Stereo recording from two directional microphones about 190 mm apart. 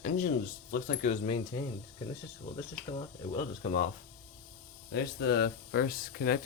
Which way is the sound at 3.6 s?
40° left (ahead or behind).